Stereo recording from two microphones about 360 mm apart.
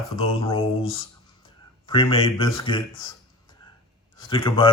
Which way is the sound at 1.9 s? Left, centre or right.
Centre.